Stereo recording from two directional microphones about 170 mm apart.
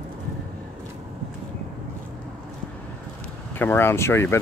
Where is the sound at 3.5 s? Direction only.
15° left (ahead or behind).